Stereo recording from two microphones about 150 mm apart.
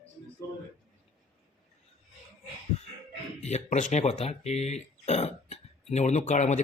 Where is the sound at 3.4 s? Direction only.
50° left (ahead or behind).